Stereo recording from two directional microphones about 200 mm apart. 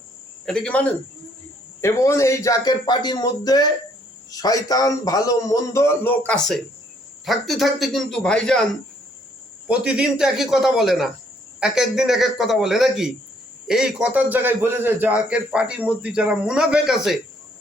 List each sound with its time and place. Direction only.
0.4 s a man's voice: 5° left (ahead or behind)
9.6 s a man's voice: 5° right (ahead or behind)